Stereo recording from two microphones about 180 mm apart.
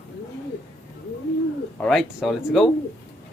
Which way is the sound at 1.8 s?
Centre (ahead or behind).